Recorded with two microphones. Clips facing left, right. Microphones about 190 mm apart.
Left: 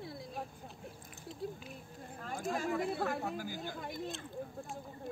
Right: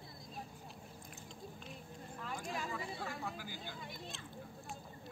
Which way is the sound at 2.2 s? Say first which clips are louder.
Left 6 dB; 45° left (ahead or behind).